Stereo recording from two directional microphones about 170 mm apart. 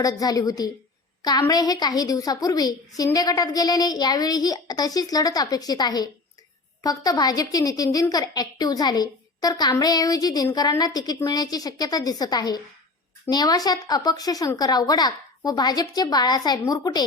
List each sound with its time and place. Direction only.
0.0 s a woman's voice: 20° left (ahead or behind)